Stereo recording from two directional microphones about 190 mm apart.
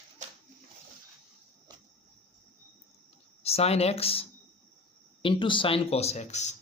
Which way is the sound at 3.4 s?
35° left (ahead or behind).